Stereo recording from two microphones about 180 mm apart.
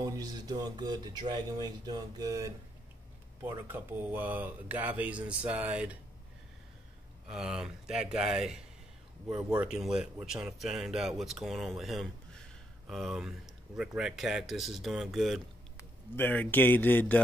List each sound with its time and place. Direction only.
0.0 s speech: 20° right (ahead or behind)
7.2 s speech: centre (ahead or behind)
15.8 s a man's voice: 10° left (ahead or behind)